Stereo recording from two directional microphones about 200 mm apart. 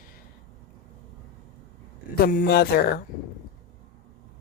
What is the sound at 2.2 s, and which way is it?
Speech, 45° left (ahead or behind).